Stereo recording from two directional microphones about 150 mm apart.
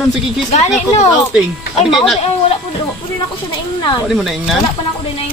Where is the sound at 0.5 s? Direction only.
50° left (ahead or behind).